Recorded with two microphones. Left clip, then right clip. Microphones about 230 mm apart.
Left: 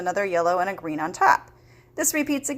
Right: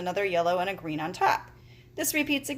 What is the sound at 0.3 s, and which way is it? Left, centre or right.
Speech, left.